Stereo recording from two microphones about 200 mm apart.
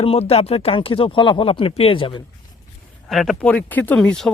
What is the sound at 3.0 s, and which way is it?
Speech, centre (ahead or behind).